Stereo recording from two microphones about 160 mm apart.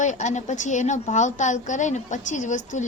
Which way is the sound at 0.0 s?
50° left (ahead or behind).